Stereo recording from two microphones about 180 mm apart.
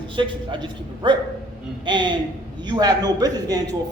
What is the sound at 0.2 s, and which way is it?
A man's voice, 25° right (ahead or behind).